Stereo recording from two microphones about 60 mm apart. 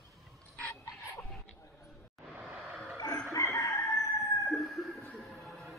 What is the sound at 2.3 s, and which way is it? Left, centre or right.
Vehicle, centre.